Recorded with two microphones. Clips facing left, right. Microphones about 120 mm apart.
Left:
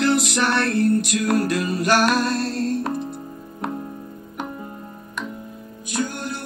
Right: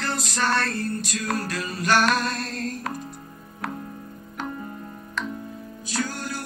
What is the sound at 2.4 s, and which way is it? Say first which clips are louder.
Music: left 7 dB; 30° left (ahead or behind).